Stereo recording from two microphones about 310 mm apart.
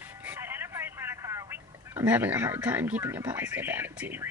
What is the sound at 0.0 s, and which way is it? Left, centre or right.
Vehicle, centre.